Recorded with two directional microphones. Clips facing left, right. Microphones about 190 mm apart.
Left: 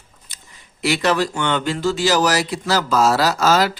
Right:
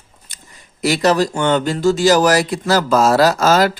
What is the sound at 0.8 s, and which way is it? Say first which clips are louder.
Speech: right 4 dB; 40° right (ahead or behind).